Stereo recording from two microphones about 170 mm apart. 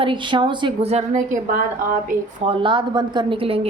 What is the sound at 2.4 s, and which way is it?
A woman's voice, 30° right (ahead or behind).